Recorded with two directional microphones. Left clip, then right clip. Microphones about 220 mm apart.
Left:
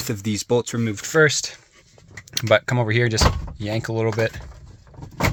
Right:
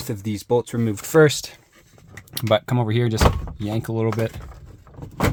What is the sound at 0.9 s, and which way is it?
Speech, 35° right (ahead or behind).